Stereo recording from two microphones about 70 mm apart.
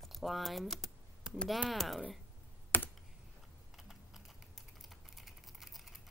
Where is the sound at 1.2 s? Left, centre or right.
Centre.